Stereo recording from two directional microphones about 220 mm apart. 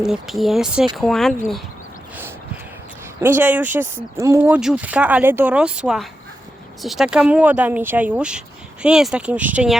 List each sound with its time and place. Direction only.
0.0 s speech: centre (ahead or behind)
3.2 s speech: 10° right (ahead or behind)